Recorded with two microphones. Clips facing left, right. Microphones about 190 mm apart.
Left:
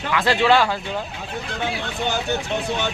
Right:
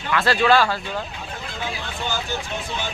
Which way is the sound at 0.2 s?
20° left (ahead or behind).